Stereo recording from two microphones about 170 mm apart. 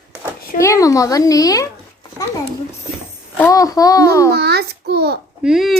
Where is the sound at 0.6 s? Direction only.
20° left (ahead or behind).